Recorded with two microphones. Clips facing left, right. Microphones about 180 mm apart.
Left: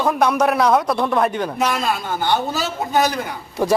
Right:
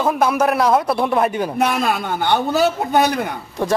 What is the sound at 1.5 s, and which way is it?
A man's voice, 60° right (ahead or behind).